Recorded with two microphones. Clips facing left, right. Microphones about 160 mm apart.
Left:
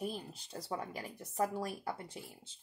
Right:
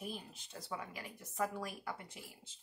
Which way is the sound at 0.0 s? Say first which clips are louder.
Left 5 dB; 35° left (ahead or behind).